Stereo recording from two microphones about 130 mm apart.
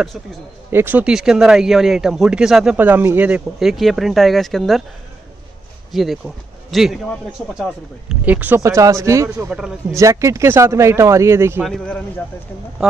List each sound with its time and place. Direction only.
0.7 s a man's voice: 15° right (ahead or behind); by 4.8 s centre (ahead or behind)
5.9 s speech: centre (ahead or behind)
8.1 s speech: 10° right (ahead or behind)
8.5 s speech: 25° right (ahead or behind)
9.5 s a man's voice: 5° right (ahead or behind)
9.9 s speech: 25° right (ahead or behind)
11.6 s a man's voice: 5° left (ahead or behind)